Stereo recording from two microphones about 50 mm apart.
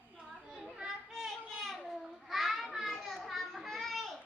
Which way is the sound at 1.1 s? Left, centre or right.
Centre.